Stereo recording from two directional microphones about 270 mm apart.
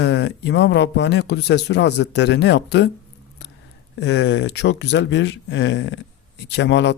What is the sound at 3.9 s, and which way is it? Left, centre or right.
A man's voice, left.